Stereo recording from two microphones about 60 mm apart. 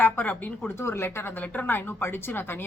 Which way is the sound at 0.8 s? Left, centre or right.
Left.